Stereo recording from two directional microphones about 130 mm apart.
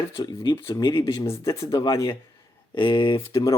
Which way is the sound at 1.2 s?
25° left (ahead or behind).